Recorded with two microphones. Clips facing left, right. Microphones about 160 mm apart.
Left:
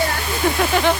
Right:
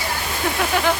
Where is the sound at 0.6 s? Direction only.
Centre (ahead or behind).